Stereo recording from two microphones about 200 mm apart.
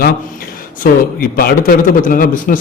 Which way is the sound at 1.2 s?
50° left (ahead or behind).